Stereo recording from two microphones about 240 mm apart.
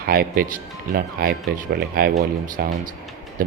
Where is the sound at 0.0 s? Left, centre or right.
Right.